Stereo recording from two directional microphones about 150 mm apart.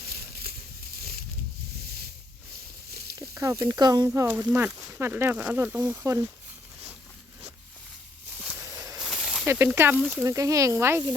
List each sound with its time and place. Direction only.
0.1 s a sound: 90° right
3.2 s snake: 20° right (ahead or behind)
3.6 s speech: 25° right (ahead or behind)
9.0 s snake: centre (ahead or behind)
9.5 s speech: 15° right (ahead or behind)